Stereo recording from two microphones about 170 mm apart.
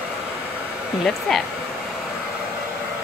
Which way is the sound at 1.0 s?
Centre (ahead or behind).